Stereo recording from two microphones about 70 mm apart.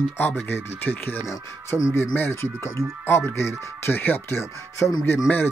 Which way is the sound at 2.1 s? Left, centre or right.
Left.